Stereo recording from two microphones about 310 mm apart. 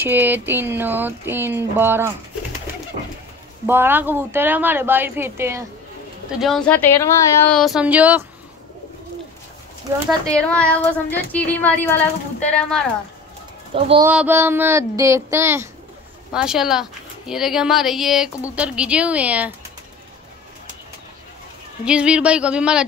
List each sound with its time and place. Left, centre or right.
0.0 s speech: centre
3.6 s speech: centre
6.4 s speech: centre
10.5 s speech: centre
13.7 s speech: centre
14.0 s speech: centre
21.8 s speech: centre